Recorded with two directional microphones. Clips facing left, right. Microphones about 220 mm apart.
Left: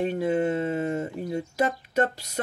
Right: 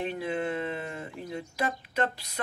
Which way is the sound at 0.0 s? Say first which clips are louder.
Left 7 dB; 45° left (ahead or behind).